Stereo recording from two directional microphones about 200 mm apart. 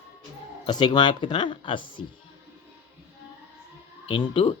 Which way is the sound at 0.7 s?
20° left (ahead or behind).